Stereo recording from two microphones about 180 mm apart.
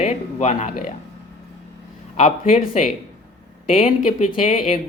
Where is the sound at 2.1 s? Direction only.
40° left (ahead or behind).